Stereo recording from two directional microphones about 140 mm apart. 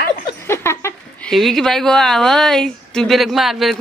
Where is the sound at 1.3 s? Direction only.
Centre (ahead or behind).